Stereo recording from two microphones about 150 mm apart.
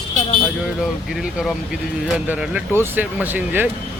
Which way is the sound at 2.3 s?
10° right (ahead or behind).